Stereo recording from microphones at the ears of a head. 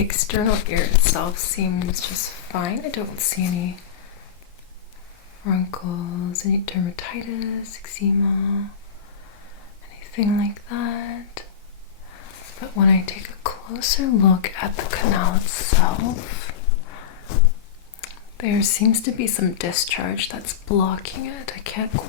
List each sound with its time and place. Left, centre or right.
0.1 s speech: left
5.4 s speech: left
9.9 s a sound: left
10.7 s speech: left